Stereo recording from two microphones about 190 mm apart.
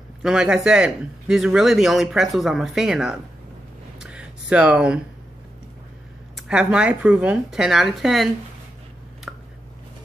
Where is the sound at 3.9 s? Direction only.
5° right (ahead or behind).